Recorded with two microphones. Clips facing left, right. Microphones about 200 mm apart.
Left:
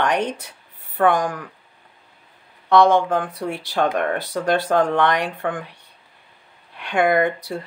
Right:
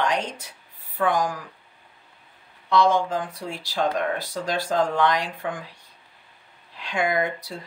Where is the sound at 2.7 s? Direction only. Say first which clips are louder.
Left 5 dB; 60° left (ahead or behind).